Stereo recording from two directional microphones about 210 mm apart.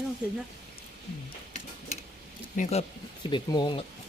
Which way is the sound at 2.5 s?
35° left (ahead or behind).